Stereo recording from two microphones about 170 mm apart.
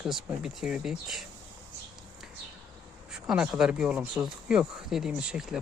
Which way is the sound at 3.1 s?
5° right (ahead or behind).